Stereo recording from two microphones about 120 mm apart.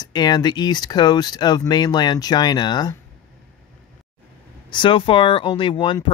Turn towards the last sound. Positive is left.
turn(degrees=45)  # may be behind; listen again after turning